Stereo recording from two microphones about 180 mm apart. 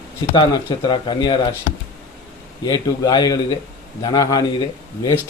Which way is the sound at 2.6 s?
20° left (ahead or behind).